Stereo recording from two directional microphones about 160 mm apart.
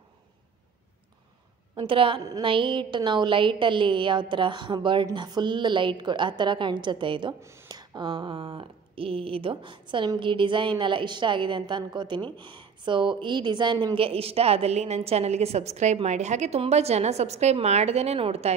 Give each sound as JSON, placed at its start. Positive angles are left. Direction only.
{"t": 1.8, "sound": "a woman's voice", "side_deg": -35}